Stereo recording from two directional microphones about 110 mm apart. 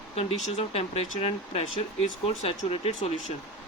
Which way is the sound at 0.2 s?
65° left (ahead or behind).